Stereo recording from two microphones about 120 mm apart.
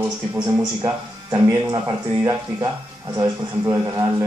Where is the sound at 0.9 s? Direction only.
20° right (ahead or behind).